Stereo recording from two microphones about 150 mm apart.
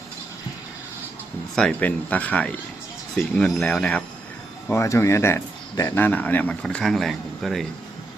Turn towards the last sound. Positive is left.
turn(degrees=0)  # may be behind; listen again after turning